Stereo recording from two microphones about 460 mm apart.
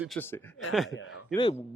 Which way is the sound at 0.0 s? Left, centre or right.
Centre.